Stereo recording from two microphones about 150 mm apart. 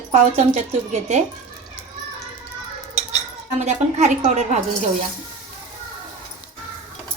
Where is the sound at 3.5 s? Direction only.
50° right (ahead or behind).